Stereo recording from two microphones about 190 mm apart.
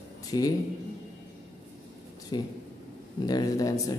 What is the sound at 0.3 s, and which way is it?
Speech, 20° left (ahead or behind).